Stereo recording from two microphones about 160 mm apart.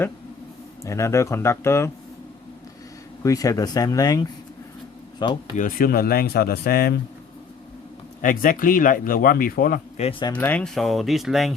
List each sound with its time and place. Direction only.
0.9 s speech: 20° left (ahead or behind)
3.2 s speech: 20° left (ahead or behind)
5.5 s speech: 60° left (ahead or behind)
8.2 s speech: 60° left (ahead or behind)
10.0 s speech: 30° left (ahead or behind)
10.3 s speech: 10° left (ahead or behind)